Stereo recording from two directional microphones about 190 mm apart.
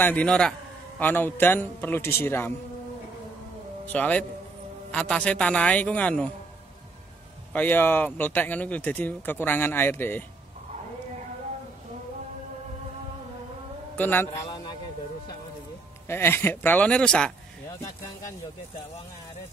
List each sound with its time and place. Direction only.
0.0 s speech: 5° left (ahead or behind)
3.8 s a man's voice: 10° left (ahead or behind)
7.5 s speech: 10° left (ahead or behind)
13.9 s speech: 10° left (ahead or behind)
16.1 s speech: 10° left (ahead or behind)